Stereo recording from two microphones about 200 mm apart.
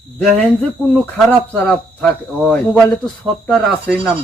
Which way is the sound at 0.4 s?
5° left (ahead or behind).